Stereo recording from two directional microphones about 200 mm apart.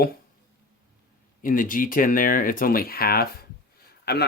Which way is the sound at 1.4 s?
45° left (ahead or behind).